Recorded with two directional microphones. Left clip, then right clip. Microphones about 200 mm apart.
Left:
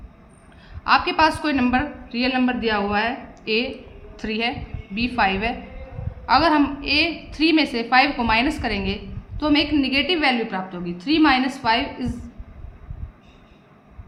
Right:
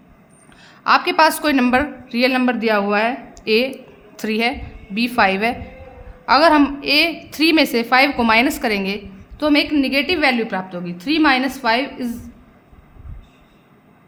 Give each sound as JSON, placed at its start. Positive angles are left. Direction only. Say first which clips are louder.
{"t": 0.9, "sound": "a woman's voice", "louder": "right 3 dB", "side_deg": -55}